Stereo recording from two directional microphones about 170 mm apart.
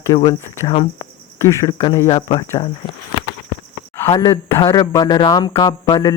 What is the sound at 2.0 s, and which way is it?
Speech, 35° left (ahead or behind).